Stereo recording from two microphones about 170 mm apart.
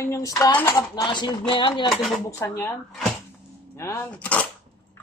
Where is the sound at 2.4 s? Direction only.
15° left (ahead or behind).